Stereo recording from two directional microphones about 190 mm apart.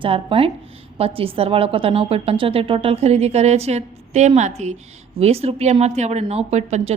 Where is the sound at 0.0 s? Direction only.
30° right (ahead or behind).